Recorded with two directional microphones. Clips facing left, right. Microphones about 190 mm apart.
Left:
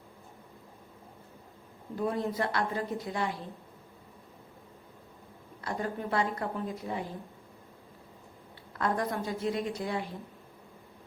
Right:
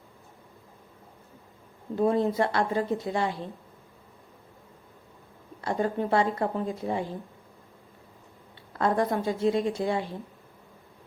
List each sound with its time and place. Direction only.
2.0 s a woman's voice: 25° right (ahead or behind)
5.6 s a woman's voice: 25° right (ahead or behind)
8.8 s a woman's voice: 25° right (ahead or behind)